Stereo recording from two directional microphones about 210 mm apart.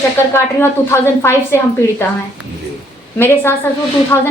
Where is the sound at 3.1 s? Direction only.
10° left (ahead or behind).